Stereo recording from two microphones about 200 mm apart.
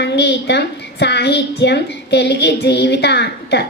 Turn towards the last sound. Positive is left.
turn(degrees=55)  # may be behind; listen again after turning